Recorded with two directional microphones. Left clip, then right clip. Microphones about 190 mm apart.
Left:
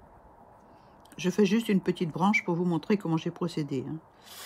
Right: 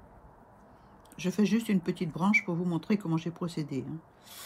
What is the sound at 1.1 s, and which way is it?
Speech, 25° left (ahead or behind).